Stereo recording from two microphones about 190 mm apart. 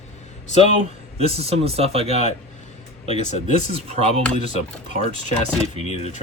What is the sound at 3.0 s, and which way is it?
Speech, 35° left (ahead or behind).